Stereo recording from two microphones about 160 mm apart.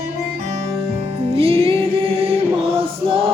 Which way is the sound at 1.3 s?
35° right (ahead or behind).